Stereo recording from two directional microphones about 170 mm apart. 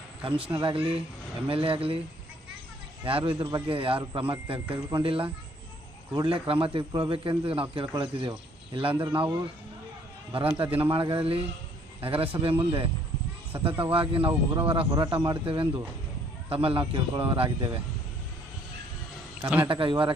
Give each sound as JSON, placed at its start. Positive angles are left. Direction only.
{"t": 0.3, "sound": "speech", "side_deg": -30}
{"t": 3.0, "sound": "speech", "side_deg": -30}
{"t": 10.3, "sound": "speech", "side_deg": -35}
{"t": 19.6, "sound": "speech", "side_deg": -30}